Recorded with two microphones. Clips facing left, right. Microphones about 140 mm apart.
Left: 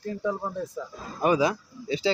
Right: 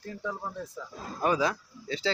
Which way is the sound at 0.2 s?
25° left (ahead or behind).